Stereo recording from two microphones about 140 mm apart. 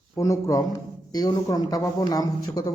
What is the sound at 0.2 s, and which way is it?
Speech, 25° left (ahead or behind).